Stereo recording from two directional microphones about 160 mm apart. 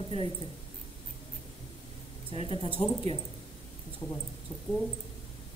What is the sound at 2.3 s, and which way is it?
Speech, 35° left (ahead or behind).